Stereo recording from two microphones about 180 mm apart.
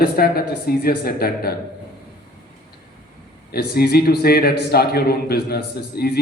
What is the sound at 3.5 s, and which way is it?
A man's voice, 60° left (ahead or behind).